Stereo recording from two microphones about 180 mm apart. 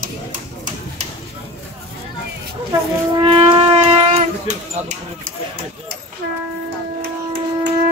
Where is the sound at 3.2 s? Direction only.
30° right (ahead or behind).